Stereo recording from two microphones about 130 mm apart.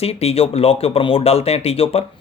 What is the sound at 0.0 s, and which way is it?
Speech, 50° left (ahead or behind).